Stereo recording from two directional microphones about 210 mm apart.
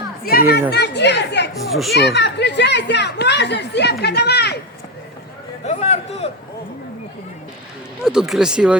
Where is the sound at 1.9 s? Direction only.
55° left (ahead or behind).